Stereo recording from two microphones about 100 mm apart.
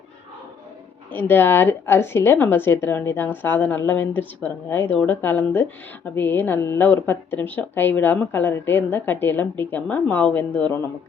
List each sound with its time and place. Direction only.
1.1 s a woman's voice: 20° left (ahead or behind)